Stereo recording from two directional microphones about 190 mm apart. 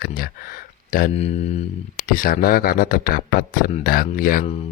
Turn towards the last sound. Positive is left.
turn(degrees=45)  # may be behind; listen again after turning